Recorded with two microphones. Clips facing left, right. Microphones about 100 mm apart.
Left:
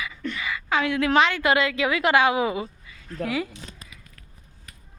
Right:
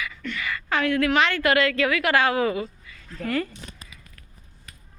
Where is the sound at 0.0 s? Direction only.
20° left (ahead or behind).